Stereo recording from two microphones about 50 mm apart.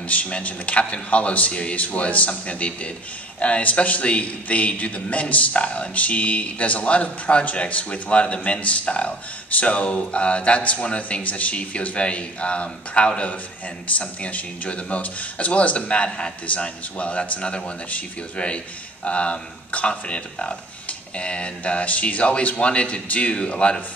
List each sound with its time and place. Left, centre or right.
0.1 s a man's voice: left